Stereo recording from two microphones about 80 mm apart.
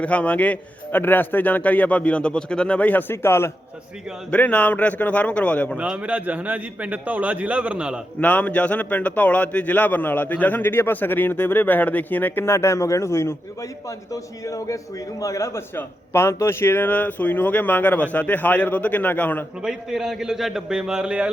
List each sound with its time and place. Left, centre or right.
0.0 s a man's voice: centre
4.3 s a man's voice: centre
5.7 s a man's voice: centre
8.2 s a man's voice: centre
12.5 s a man's voice: left
19.6 s a man's voice: centre